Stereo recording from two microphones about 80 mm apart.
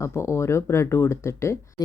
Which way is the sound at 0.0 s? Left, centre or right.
Left.